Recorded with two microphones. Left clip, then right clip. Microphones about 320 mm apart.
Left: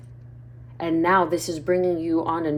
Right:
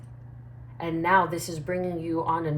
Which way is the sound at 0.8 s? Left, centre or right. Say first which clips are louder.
Left 3 dB; left.